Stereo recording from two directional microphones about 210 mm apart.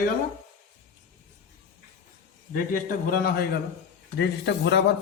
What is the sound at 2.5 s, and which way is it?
A man's voice, 40° left (ahead or behind).